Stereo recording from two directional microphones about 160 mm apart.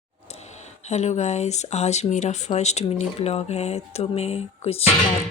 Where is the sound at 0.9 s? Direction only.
45° left (ahead or behind).